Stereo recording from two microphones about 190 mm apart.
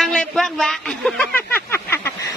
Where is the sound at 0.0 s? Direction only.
5° left (ahead or behind).